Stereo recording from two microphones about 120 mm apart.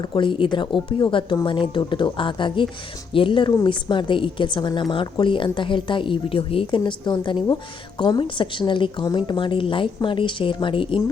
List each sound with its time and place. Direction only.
0.0 s a woman's voice: 40° left (ahead or behind)